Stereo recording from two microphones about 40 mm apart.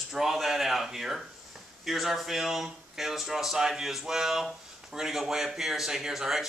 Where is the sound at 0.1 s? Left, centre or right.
Centre.